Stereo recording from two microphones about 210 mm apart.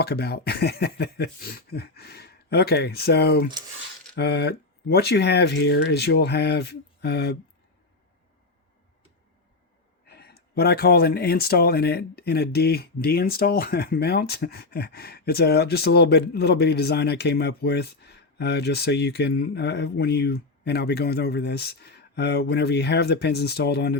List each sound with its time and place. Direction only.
0.0 s speech: 50° left (ahead or behind)
10.1 s speech: 50° left (ahead or behind)